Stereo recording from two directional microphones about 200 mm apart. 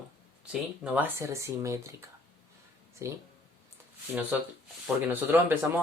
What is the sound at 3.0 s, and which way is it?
Speech, 15° right (ahead or behind).